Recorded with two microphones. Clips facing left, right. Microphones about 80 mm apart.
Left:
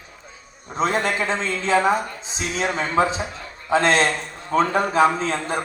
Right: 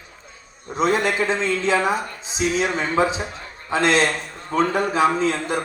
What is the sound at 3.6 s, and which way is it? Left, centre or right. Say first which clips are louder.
A man's voice: left 1 dB; left.